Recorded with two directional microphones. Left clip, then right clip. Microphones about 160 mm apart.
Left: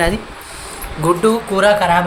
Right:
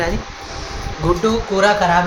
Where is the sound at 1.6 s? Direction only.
30° left (ahead or behind).